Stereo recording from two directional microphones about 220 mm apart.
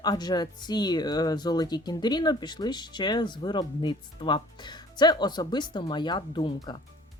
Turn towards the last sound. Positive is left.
turn(degrees=20)  # may be behind; listen again after turning